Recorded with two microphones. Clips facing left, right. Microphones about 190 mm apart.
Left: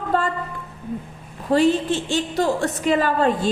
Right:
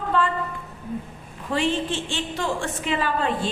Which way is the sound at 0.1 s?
40° left (ahead or behind).